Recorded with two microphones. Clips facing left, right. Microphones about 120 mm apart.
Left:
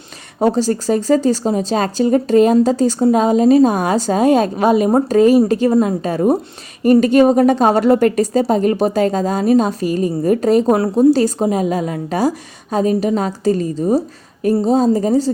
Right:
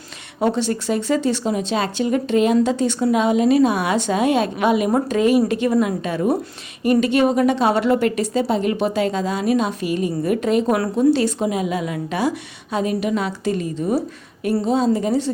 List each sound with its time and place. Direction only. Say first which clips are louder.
0.3 s speech: left 5 dB; 40° left (ahead or behind)